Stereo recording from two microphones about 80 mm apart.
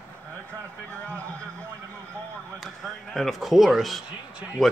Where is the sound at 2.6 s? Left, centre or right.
Centre.